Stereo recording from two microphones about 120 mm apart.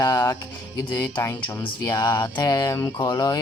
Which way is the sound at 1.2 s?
20° left (ahead or behind).